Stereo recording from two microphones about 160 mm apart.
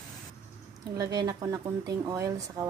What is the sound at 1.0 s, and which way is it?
Speech, 25° right (ahead or behind).